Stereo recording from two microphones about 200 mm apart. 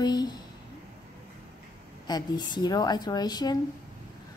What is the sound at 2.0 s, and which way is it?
A woman's voice, 20° left (ahead or behind).